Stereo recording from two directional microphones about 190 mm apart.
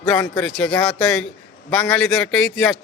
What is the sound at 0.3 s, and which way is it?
A man's voice, centre (ahead or behind).